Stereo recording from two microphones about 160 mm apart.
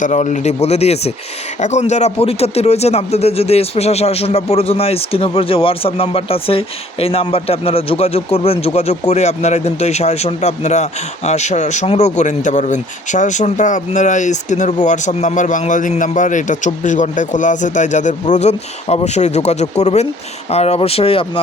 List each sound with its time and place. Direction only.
0.0 s speech: 50° left (ahead or behind)